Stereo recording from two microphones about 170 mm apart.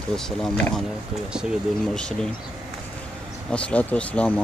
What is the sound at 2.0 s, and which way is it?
Speech, 5° left (ahead or behind).